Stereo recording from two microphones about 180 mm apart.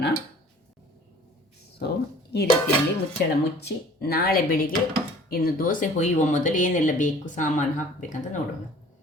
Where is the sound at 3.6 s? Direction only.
60° left (ahead or behind); by 7.5 s 45° left (ahead or behind).